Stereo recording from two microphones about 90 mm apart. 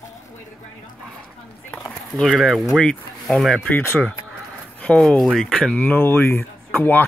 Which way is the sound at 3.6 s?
20° left (ahead or behind).